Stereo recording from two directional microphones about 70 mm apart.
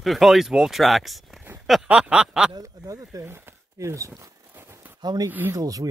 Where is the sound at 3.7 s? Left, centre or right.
Right.